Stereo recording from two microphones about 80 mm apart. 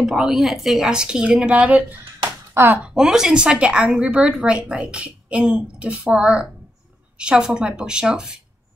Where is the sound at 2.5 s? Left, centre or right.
Right.